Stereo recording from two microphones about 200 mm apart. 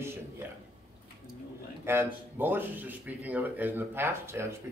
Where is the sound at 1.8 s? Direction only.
10° right (ahead or behind).